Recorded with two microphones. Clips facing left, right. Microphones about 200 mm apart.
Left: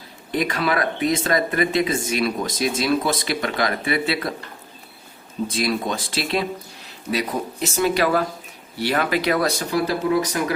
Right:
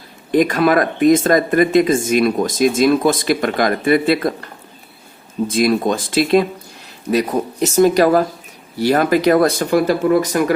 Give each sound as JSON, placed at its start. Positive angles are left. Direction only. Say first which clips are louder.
{"t": 0.3, "sound": "speech", "louder": "right 8 dB", "side_deg": -45}
{"t": 5.5, "sound": "speech", "louder": "right 8 dB", "side_deg": -45}